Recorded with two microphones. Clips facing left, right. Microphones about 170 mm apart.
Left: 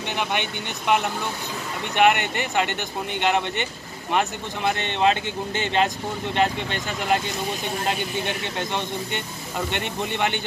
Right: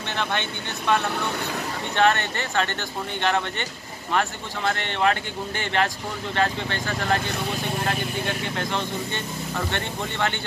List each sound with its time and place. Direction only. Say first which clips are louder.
0.1 s speech: left 1 dB; 15° left (ahead or behind)